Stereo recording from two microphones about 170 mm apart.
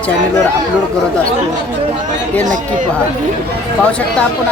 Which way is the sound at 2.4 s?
50° right (ahead or behind).